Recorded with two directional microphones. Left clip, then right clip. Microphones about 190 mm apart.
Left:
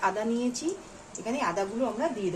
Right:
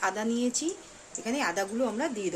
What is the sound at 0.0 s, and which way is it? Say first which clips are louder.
A woman's voice: left 1 dB; 35° right (ahead or behind).